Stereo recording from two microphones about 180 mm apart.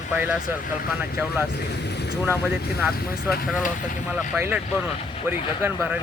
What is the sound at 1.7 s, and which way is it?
Speech, 70° left (ahead or behind).